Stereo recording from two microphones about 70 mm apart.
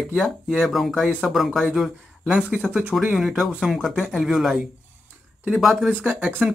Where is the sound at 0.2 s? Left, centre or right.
Centre.